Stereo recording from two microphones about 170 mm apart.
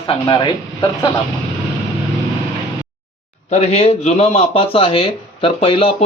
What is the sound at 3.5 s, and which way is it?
Speech, 40° left (ahead or behind).